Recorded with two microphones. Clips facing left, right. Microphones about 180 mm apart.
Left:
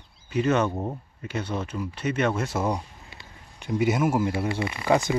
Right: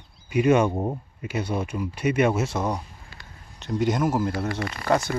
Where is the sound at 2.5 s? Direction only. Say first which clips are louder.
Even; 5° left (ahead or behind).